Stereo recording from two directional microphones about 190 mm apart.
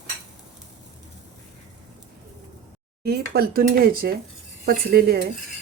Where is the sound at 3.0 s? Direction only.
55° right (ahead or behind).